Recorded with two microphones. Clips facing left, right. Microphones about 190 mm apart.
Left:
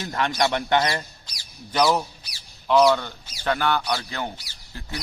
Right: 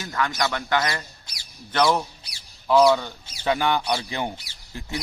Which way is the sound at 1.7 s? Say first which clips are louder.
Even; 10° left (ahead or behind).